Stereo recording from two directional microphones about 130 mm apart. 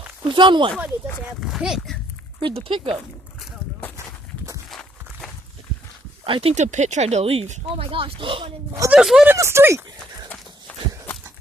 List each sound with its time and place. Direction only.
0.3 s speech: 35° right (ahead or behind)
1.4 s speech: centre (ahead or behind)
2.4 s speech: 45° right (ahead or behind)
4.7 s walk: 5° left (ahead or behind)
6.2 s speech: 40° right (ahead or behind)
6.5 s speech: 65° right (ahead or behind)
7.9 s speech: 45° right (ahead or behind)
8.9 s speech: 5° right (ahead or behind)
9.3 s speech: 20° right (ahead or behind)
10.2 s horse: 10° left (ahead or behind)